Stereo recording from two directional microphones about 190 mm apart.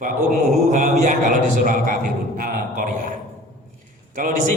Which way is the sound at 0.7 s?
40° right (ahead or behind).